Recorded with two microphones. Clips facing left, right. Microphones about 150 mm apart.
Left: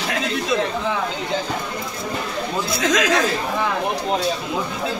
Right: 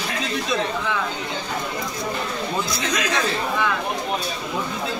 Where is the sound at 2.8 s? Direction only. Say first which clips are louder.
Left 9 dB; 90° left.